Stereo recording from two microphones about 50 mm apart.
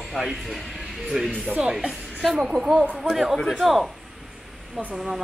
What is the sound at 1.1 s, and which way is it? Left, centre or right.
Speech, centre.